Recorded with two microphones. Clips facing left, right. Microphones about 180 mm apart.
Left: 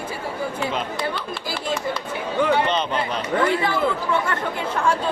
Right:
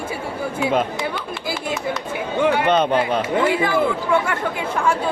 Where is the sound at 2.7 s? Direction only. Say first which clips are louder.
Right 6 dB; 55° right (ahead or behind).